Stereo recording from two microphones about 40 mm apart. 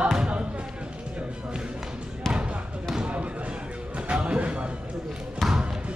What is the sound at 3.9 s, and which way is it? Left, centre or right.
Speech, right.